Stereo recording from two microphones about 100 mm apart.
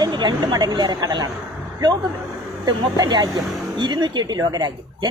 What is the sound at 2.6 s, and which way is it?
Speech, 45° right (ahead or behind).